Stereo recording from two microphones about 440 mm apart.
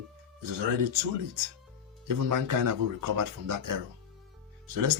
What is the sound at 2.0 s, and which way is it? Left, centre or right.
Speech, right.